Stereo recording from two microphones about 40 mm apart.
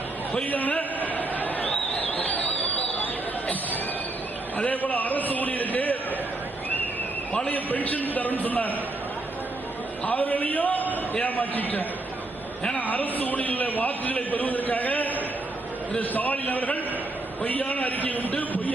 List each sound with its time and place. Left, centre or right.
0.4 s a sound: left
4.5 s a man's voice: left
7.5 s a man's voice: left
10.1 s a man's voice: left